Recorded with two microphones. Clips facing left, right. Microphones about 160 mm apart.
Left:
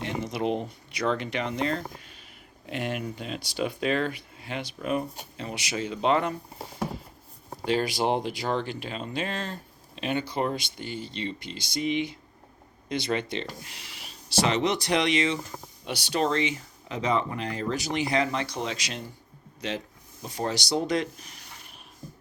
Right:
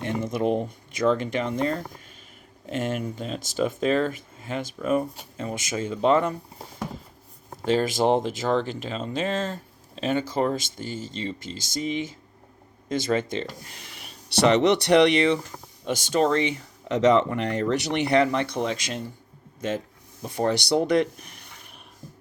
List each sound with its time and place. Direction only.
0.2 s speech: 50° right (ahead or behind)
2.6 s speech: 45° right (ahead or behind)
7.6 s speech: 45° right (ahead or behind); by 15.4 s 60° right (ahead or behind)
15.9 s speech: 45° right (ahead or behind)
16.9 s speech: 75° right (ahead or behind); by 18.9 s 50° right (ahead or behind)
20.2 s speech: 55° right (ahead or behind)